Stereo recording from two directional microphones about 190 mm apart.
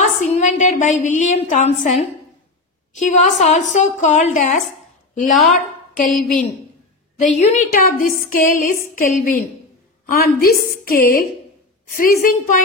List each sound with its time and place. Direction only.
0.0 s a woman's voice: 40° left (ahead or behind)
5.3 s speech: centre (ahead or behind)
5.9 s a woman's voice: 45° left (ahead or behind)
7.3 s a woman's voice: 40° left (ahead or behind)